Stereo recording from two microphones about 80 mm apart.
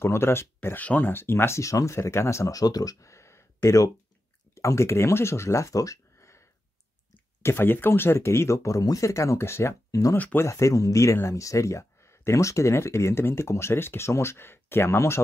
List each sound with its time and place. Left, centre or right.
0.0 s speech: left
7.4 s speech: left
9.8 s speech: left
10.1 s speech: left
10.4 s speech: left